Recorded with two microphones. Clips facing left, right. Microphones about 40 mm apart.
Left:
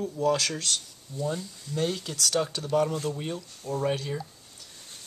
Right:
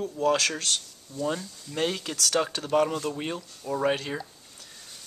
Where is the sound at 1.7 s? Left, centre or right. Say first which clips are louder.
Right 1 dB; right.